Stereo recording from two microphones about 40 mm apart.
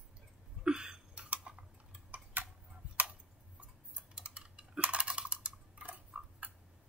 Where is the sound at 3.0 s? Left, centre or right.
Right.